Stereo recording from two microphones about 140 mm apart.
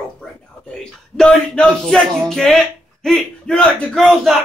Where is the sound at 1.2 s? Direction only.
5° left (ahead or behind).